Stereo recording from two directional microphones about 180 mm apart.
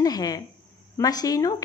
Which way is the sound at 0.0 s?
20° left (ahead or behind).